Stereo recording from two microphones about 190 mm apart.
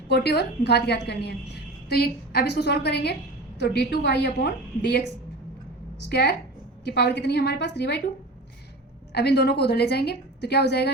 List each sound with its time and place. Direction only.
0.1 s a woman's voice: 60° left (ahead or behind)
6.1 s a woman's voice: 60° left (ahead or behind)
9.1 s a woman's voice: 60° left (ahead or behind)